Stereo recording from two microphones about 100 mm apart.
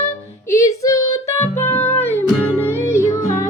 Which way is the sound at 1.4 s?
20° left (ahead or behind).